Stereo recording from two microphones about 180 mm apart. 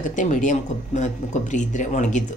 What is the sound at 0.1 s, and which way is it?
Speech, 45° left (ahead or behind).